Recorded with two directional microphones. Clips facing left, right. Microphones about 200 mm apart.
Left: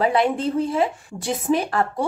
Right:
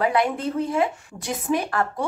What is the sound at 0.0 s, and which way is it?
Speech, 30° left (ahead or behind).